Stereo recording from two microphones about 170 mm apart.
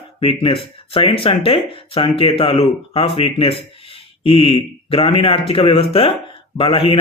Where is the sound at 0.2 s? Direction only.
35° left (ahead or behind).